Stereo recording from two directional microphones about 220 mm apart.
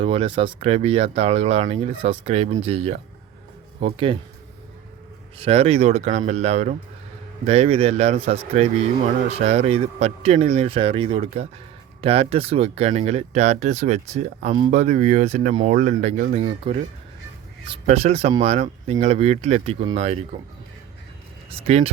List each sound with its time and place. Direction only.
0.0 s speech: 25° right (ahead or behind)
5.4 s speech: 25° right (ahead or behind)